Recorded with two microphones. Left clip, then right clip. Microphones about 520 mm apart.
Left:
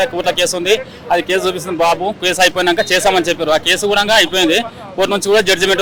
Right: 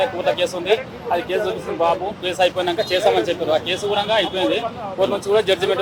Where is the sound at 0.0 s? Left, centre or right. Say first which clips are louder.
Left 4 dB; left.